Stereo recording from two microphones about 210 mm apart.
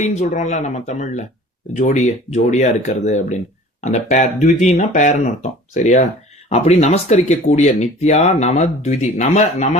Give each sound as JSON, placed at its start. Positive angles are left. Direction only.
{"t": 0.0, "sound": "speech", "side_deg": 35}